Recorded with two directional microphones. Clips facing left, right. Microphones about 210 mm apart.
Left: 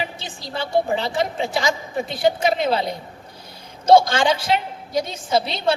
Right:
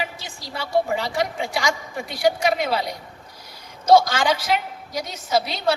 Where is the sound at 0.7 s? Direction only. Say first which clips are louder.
Left 1 dB; 25° left (ahead or behind).